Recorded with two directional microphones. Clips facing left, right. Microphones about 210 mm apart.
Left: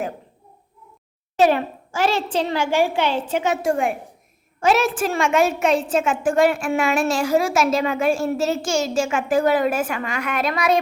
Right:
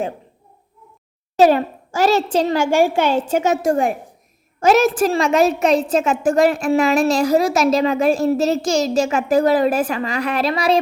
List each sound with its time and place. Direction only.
1.4 s a woman's voice: 40° right (ahead or behind)